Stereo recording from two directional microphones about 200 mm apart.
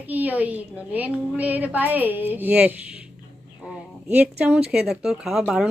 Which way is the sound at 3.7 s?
10° right (ahead or behind).